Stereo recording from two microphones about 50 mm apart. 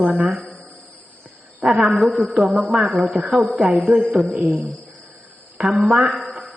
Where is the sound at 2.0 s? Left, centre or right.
Centre.